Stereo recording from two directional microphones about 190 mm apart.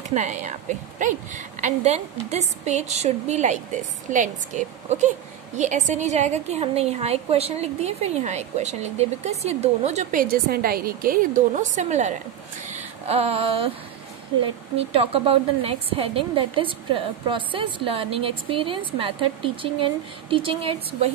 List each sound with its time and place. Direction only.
0.1 s a woman's voice: 40° right (ahead or behind)
10.2 s a woman's voice: 50° right (ahead or behind)
12.6 s a sound: 35° right (ahead or behind)
15.0 s a woman's voice: 30° right (ahead or behind)